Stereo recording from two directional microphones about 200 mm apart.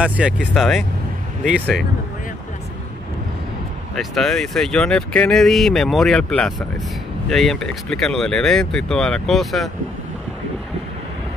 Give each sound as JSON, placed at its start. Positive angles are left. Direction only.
{"t": 0.2, "sound": "speech", "side_deg": -5}
{"t": 3.9, "sound": "speech", "side_deg": 0}